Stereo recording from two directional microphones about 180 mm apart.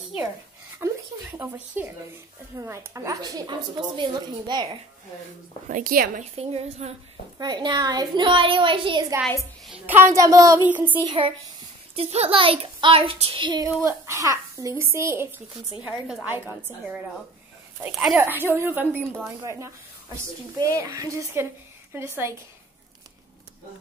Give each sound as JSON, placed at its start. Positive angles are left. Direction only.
{"t": 1.8, "sound": "a child's voice", "side_deg": -10}
{"t": 5.7, "sound": "a woman's voice", "side_deg": -50}
{"t": 6.3, "sound": "a child's voice", "side_deg": -35}
{"t": 7.3, "sound": "a woman's voice", "side_deg": -25}
{"t": 9.7, "sound": "a child's voice", "side_deg": -10}
{"t": 11.1, "sound": "a woman's voice", "side_deg": -30}
{"t": 13.8, "sound": "a child's voice", "side_deg": -15}
{"t": 20.7, "sound": "a child's voice", "side_deg": -15}